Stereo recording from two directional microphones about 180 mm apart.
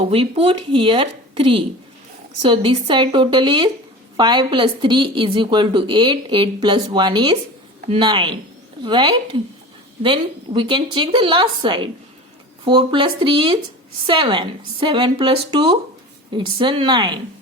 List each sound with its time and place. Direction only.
0.1 s a woman's voice: 30° right (ahead or behind)